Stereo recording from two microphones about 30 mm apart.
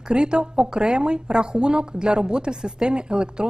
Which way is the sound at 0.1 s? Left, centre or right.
Right.